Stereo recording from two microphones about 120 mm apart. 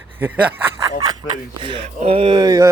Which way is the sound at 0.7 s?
30° right (ahead or behind).